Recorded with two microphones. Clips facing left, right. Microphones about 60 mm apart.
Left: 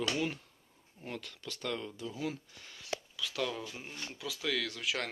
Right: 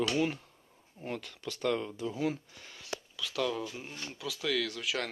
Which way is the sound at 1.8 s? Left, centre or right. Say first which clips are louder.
Right 5 dB; right.